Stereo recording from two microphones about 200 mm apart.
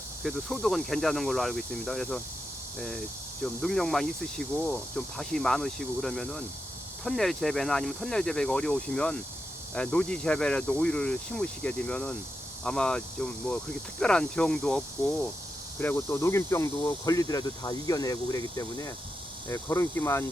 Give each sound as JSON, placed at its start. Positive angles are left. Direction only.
{"t": 0.2, "sound": "speech", "side_deg": 0}
{"t": 15.8, "sound": "speech", "side_deg": 10}